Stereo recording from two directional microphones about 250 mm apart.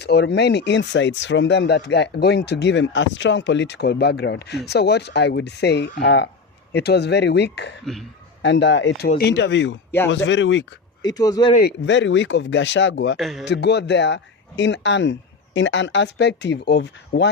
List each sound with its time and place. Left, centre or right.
0.0 s speech: left
11.0 s speech: centre
11.5 s speech: left
13.1 s a man's voice: centre
13.4 s speech: left